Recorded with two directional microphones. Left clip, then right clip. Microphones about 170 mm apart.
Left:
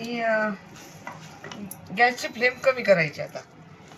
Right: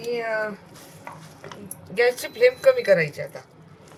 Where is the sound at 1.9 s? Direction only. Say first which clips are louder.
Right 2 dB; 90° right.